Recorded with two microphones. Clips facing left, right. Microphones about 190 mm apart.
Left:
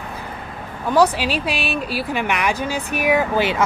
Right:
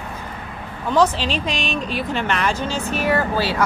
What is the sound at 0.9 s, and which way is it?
Speech, 10° left (ahead or behind).